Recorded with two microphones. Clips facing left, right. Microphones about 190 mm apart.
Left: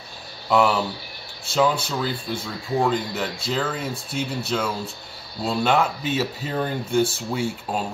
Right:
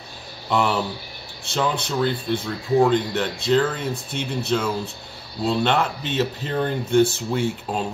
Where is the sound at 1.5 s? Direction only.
5° left (ahead or behind).